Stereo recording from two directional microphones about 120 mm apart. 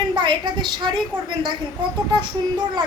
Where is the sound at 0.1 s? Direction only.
40° right (ahead or behind).